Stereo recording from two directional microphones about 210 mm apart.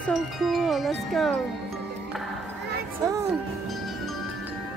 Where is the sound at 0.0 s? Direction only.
Centre (ahead or behind).